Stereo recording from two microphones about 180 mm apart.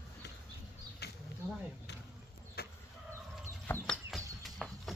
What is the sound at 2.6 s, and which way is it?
Vehicle, 60° left (ahead or behind).